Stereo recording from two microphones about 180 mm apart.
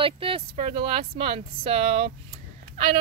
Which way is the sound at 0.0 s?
30° right (ahead or behind).